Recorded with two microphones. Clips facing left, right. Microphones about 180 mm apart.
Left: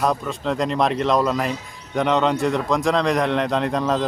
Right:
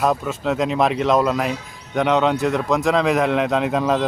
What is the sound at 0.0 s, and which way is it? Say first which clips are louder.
A man's voice: right 2 dB; 5° right (ahead or behind).